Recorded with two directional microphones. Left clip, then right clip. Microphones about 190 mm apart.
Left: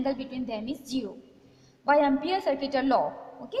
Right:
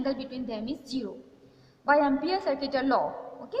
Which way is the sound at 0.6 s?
90° left.